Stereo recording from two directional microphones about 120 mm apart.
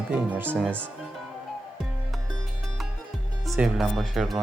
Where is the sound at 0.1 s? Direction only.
15° right (ahead or behind).